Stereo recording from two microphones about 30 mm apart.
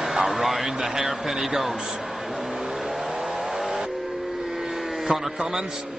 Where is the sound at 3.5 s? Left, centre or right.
Centre.